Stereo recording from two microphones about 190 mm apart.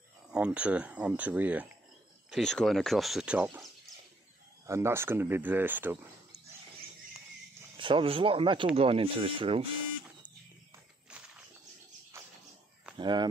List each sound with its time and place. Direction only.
0.3 s speech: 5° right (ahead or behind)
4.6 s speech: 15° right (ahead or behind)
7.7 s speech: 25° right (ahead or behind)
12.9 s speech: 25° right (ahead or behind)